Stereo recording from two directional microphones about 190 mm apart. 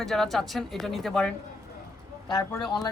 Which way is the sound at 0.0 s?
Centre (ahead or behind).